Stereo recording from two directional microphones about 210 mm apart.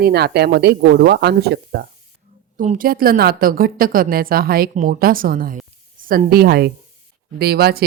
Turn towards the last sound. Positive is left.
turn(degrees=-50)  # may be behind; listen again after turning